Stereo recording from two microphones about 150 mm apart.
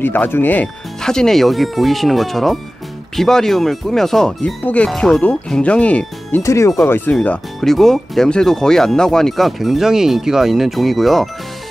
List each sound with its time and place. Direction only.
0.0 s speech: 15° left (ahead or behind)
6.4 s speech: 20° left (ahead or behind)
7.2 s speech: centre (ahead or behind)